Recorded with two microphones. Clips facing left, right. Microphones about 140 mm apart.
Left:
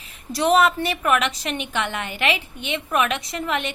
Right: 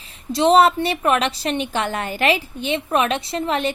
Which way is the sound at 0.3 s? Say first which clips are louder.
Right 4 dB; 25° right (ahead or behind).